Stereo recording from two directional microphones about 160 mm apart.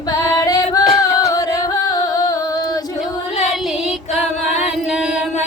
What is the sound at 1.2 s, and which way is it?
Music, 20° left (ahead or behind).